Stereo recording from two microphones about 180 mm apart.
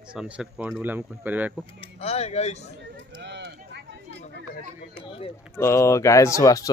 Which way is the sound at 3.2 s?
75° right (ahead or behind).